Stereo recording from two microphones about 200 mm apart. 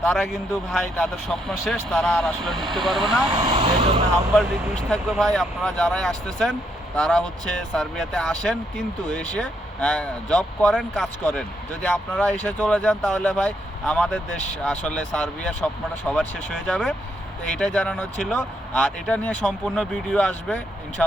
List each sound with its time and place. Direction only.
0.0 s speech: centre (ahead or behind)
3.2 s speech: 25° right (ahead or behind)
4.9 s speech: centre (ahead or behind)